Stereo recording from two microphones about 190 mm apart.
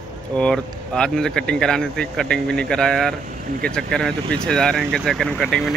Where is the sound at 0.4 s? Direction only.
5° left (ahead or behind).